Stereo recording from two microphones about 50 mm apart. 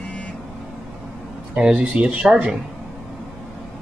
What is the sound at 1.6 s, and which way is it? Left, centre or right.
Speech, centre.